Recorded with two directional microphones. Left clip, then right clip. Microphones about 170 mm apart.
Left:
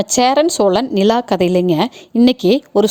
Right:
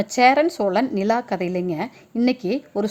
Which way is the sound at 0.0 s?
45° left (ahead or behind).